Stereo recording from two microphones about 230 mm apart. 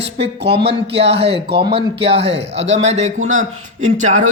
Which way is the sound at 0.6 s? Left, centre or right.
Right.